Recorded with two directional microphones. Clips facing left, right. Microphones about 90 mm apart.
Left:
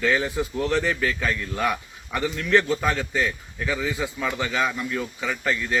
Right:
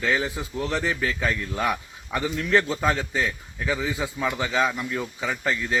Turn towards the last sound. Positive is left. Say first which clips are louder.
# even
turn(degrees=-20)  # may be behind; listen again after turning